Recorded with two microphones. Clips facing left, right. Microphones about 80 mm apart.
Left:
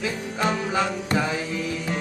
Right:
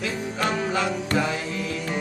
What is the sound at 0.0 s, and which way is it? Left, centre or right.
Music, centre.